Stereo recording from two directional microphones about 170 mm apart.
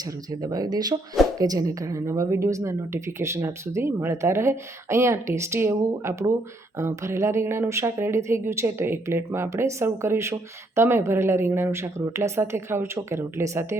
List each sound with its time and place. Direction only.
0.4 s speech: 20° right (ahead or behind)